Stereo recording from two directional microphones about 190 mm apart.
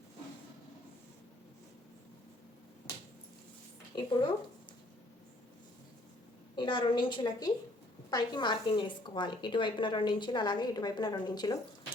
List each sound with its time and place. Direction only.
3.9 s a woman's voice: 25° left (ahead or behind)
6.6 s a woman's voice: 25° left (ahead or behind)